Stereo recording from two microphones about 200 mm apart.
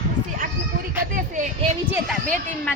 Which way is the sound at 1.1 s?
40° right (ahead or behind).